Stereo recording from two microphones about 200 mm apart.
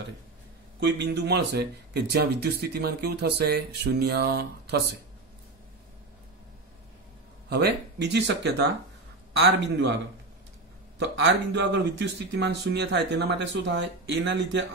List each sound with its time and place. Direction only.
0.7 s speech: 60° right (ahead or behind)
7.4 s speech: 55° right (ahead or behind)
11.0 s speech: 65° right (ahead or behind)